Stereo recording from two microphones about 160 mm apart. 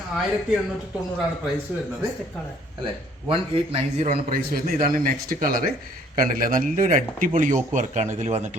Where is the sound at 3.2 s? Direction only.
35° right (ahead or behind).